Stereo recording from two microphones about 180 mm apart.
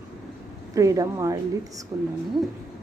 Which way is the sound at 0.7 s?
20° right (ahead or behind).